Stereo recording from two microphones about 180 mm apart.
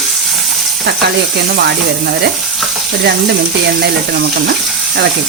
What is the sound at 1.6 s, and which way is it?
Speech, 65° right (ahead or behind).